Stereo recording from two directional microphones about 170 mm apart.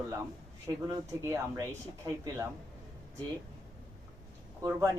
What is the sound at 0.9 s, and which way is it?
Speech, 20° right (ahead or behind).